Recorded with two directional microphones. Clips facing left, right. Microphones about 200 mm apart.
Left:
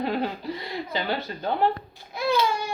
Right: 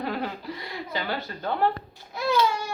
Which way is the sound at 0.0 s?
25° left (ahead or behind).